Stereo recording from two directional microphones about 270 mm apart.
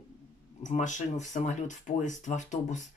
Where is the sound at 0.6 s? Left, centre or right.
Left.